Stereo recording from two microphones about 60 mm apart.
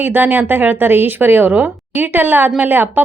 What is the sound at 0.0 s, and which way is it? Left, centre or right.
A woman's voice, right.